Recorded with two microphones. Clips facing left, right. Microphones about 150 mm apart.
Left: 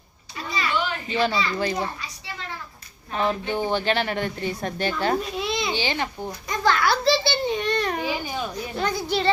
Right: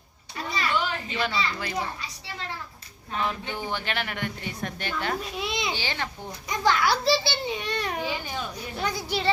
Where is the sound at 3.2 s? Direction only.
35° left (ahead or behind).